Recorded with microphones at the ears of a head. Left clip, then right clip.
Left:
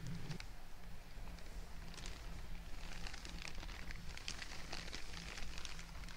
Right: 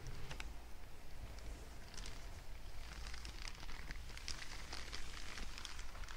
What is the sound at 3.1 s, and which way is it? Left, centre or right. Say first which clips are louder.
Rain on surface: left 1 dB; centre.